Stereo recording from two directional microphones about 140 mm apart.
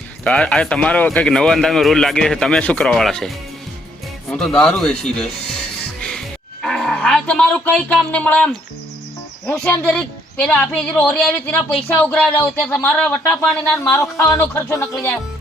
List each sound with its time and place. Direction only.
0.3 s speech: 10° left (ahead or behind)
6.0 s music: 5° left (ahead or behind)
8.1 s speech: 10° left (ahead or behind)